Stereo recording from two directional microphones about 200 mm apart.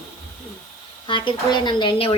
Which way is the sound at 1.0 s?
25° left (ahead or behind).